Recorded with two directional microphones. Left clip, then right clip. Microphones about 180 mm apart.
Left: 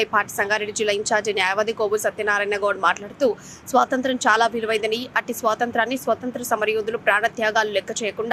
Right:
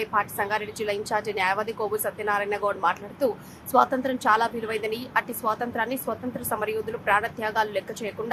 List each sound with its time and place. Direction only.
0.0 s a woman's voice: 20° left (ahead or behind)